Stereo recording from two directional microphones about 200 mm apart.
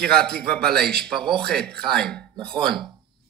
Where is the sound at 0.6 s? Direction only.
50° right (ahead or behind).